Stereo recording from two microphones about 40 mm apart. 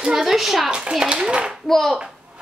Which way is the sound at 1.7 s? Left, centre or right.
Centre.